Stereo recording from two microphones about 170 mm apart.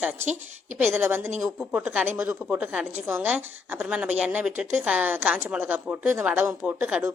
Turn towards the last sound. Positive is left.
turn(degrees=-5)  # may be behind; listen again after turning